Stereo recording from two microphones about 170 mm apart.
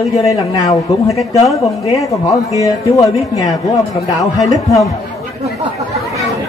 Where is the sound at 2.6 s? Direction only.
20° left (ahead or behind).